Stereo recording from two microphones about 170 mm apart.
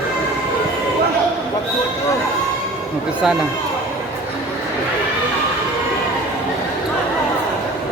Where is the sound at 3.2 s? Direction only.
5° right (ahead or behind).